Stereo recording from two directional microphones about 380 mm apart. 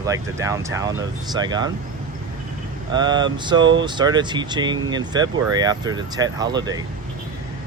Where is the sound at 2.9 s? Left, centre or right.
Centre.